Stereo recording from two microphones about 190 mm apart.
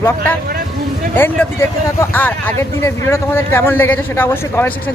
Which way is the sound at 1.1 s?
10° left (ahead or behind).